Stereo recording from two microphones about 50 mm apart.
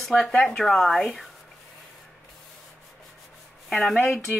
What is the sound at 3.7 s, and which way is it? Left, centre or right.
Speech, centre.